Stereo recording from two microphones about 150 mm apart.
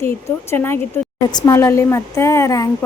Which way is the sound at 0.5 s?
15° left (ahead or behind).